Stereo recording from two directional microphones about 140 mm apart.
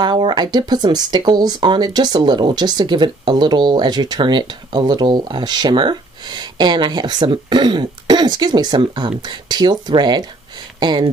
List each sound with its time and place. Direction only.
0.0 s speech: 30° right (ahead or behind)